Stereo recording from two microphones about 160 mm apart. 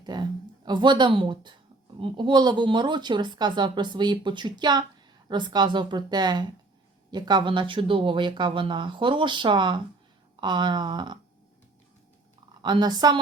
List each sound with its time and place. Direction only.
0.0 s speech: 25° right (ahead or behind)
12.6 s speech: 25° right (ahead or behind)